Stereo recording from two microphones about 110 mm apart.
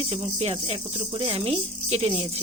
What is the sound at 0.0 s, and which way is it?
Speech, 60° right (ahead or behind).